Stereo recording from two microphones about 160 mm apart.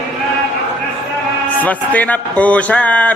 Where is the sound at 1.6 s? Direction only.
10° left (ahead or behind).